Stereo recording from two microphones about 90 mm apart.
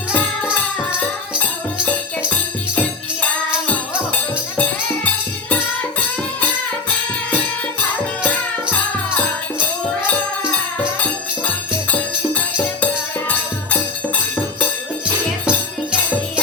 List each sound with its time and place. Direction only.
4.1 s music: 15° left (ahead or behind)
13.2 s music: 15° left (ahead or behind)
15.4 s music: 10° right (ahead or behind)